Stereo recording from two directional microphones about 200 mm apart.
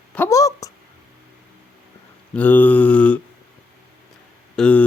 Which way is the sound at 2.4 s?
10° left (ahead or behind).